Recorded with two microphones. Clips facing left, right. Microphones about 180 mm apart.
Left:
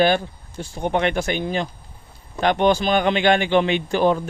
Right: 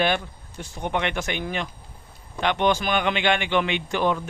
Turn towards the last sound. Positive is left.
turn(degrees=35)  # may be behind; listen again after turning